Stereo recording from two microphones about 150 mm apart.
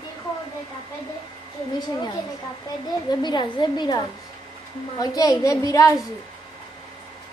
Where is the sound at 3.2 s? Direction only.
30° left (ahead or behind).